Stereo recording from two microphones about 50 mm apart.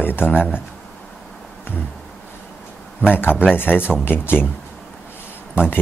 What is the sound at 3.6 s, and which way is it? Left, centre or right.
Speech, left.